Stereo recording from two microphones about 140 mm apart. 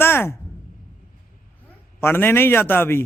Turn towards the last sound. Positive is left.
turn(degrees=15)  # may be behind; listen again after turning